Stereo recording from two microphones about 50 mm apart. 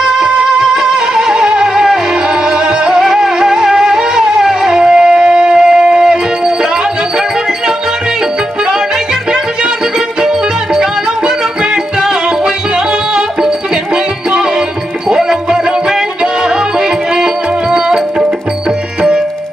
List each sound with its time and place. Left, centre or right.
0.0 s music: centre
11.7 s music: centre
17.7 s tabla: centre